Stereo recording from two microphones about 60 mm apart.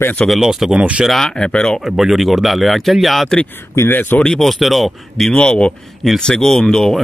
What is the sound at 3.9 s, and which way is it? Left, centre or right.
Speech, left.